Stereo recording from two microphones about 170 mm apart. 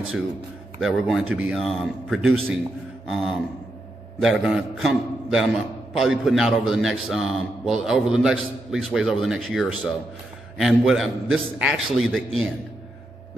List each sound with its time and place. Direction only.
0.7 s a man's voice: centre (ahead or behind)